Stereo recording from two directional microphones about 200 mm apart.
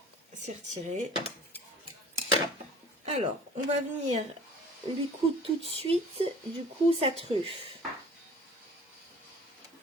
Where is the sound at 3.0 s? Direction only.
30° right (ahead or behind).